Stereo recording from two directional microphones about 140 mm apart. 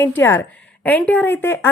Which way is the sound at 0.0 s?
15° left (ahead or behind).